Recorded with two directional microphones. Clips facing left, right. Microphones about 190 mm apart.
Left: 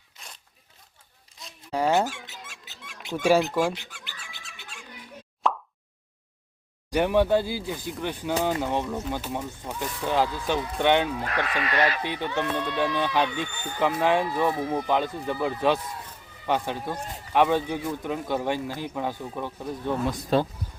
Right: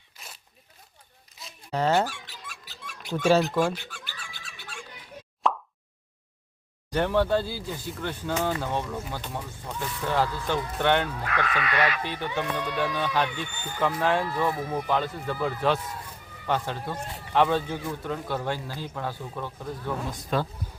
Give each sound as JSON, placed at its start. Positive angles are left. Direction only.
{"t": 0.2, "sound": "zipper", "side_deg": -5}
{"t": 1.4, "sound": "a sound", "side_deg": -5}
{"t": 1.7, "sound": "squeak", "side_deg": 10}
{"t": 3.2, "sound": "speech", "side_deg": 15}
{"t": 3.8, "sound": "music", "side_deg": 20}
{"t": 5.4, "sound": "plop", "side_deg": 0}
{"t": 6.9, "sound": "speech", "side_deg": 15}
{"t": 11.3, "sound": "speech", "side_deg": 35}
{"t": 12.0, "sound": "speech", "side_deg": 15}
{"t": 12.3, "sound": "speech", "side_deg": -10}
{"t": 12.7, "sound": "speech", "side_deg": 15}
{"t": 20.3, "sound": "speech", "side_deg": 30}